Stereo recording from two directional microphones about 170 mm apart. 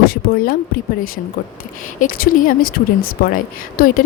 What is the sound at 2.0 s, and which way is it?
A woman's voice, 55° left (ahead or behind).